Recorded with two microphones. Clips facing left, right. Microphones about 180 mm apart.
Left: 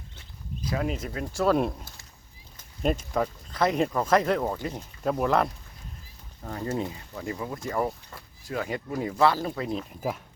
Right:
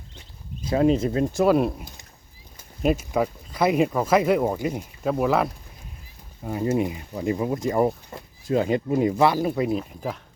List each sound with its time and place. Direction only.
0.6 s speech: 25° right (ahead or behind)
2.6 s speech: 5° right (ahead or behind)
6.4 s speech: 15° right (ahead or behind)